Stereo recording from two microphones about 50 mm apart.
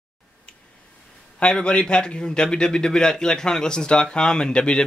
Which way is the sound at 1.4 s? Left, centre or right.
Left.